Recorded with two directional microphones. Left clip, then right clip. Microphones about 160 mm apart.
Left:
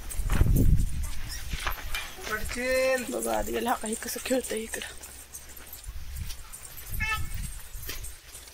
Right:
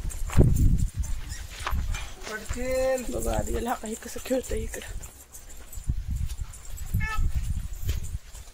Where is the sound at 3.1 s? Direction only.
Centre (ahead or behind).